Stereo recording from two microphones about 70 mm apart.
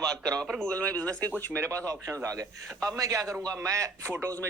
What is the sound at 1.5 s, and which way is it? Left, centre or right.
Speech, right.